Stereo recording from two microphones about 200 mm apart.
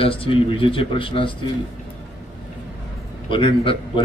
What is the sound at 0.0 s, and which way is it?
A man's voice, 25° left (ahead or behind).